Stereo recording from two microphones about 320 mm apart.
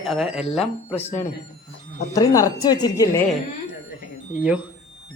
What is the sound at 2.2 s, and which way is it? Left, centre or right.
A woman's voice, centre.